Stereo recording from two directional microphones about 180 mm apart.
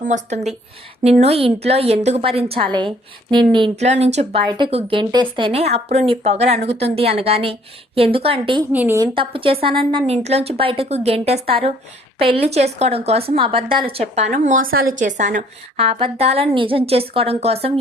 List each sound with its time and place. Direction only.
0.0 s a woman's voice: 40° right (ahead or behind); by 3.7 s 25° right (ahead or behind)
3.8 s speech: 40° right (ahead or behind)
8.7 s a woman's voice: 10° right (ahead or behind)
9.1 s a woman's voice: 30° right (ahead or behind)
15.8 s speech: 30° right (ahead or behind)